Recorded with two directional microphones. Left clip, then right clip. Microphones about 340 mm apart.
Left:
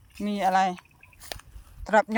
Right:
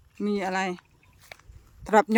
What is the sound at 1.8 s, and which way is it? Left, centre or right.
Speech, centre.